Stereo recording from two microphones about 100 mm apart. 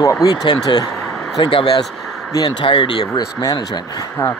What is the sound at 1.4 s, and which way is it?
Speech, 60° left (ahead or behind).